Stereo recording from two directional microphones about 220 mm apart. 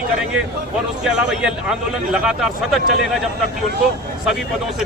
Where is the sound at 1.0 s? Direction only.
5° right (ahead or behind).